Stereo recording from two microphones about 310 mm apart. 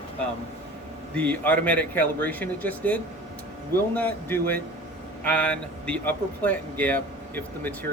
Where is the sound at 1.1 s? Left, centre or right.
Centre.